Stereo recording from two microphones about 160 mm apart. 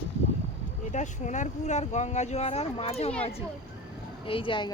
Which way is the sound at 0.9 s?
50° left (ahead or behind).